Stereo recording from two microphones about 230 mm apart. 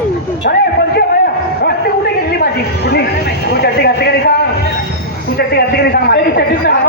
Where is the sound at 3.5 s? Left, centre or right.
Left.